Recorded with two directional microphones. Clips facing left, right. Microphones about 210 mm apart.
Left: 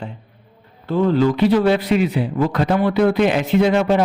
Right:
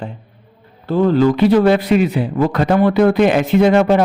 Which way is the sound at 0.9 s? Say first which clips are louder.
Right 3 dB; 40° right (ahead or behind).